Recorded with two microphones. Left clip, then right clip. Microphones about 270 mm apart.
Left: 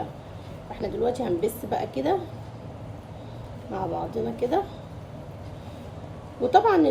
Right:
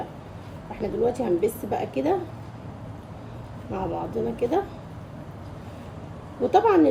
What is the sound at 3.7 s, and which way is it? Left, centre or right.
Speech, right.